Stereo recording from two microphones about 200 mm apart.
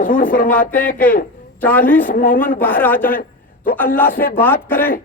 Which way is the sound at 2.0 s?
45° left (ahead or behind).